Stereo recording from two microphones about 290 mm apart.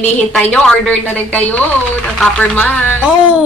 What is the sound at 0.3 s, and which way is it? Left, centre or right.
Speech, centre.